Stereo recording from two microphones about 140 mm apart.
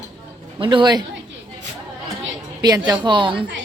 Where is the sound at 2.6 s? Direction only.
35° right (ahead or behind).